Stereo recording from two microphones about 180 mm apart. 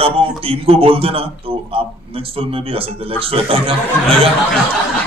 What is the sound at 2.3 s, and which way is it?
A man's voice, 30° right (ahead or behind).